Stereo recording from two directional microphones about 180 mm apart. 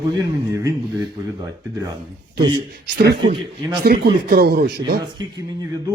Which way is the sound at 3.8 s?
60° right (ahead or behind).